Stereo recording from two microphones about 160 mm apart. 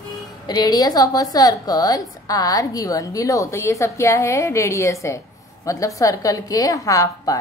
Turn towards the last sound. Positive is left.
turn(degrees=20)  # may be behind; listen again after turning